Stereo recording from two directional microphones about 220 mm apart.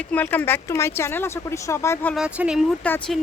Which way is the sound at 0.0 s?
5° left (ahead or behind).